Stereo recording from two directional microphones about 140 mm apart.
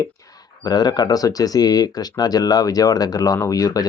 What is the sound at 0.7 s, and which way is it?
Speech, 30° left (ahead or behind).